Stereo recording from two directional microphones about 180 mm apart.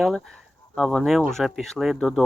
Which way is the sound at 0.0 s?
Centre (ahead or behind).